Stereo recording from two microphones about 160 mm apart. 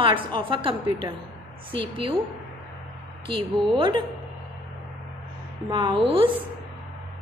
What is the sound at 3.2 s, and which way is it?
Speech, 30° right (ahead or behind).